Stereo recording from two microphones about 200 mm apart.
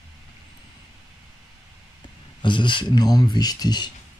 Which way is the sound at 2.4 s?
25° left (ahead or behind).